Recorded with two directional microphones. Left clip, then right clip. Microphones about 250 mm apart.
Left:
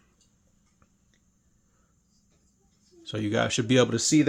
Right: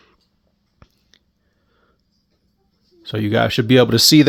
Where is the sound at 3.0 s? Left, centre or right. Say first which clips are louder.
Right 9 dB; right.